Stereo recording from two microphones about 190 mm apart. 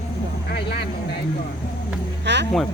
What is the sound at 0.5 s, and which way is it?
Speech, 60° left (ahead or behind).